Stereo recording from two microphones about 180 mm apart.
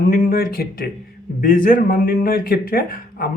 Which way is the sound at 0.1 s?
55° left (ahead or behind).